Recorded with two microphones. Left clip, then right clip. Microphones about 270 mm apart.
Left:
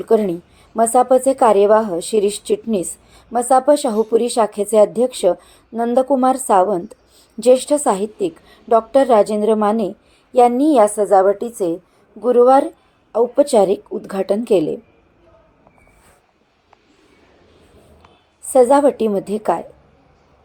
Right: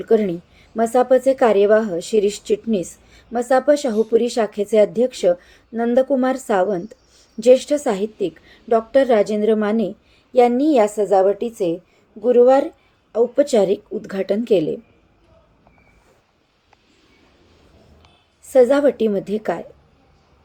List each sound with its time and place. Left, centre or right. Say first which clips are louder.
0.0 s a woman's voice: left 2 dB; centre
18.5 s a woman's voice: left 2 dB; centre